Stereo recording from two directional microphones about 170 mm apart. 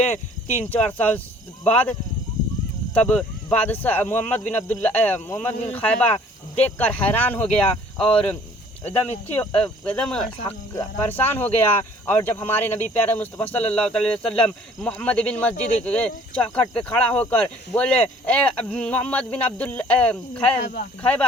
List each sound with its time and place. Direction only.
0.7 s speech: 10° left (ahead or behind)
2.9 s speech: 5° left (ahead or behind)
7.5 s cricket: 5° left (ahead or behind)
8.8 s speech: 40° left (ahead or behind)
9.4 s cricket: 5° left (ahead or behind)
11.1 s speech: 10° left (ahead or behind)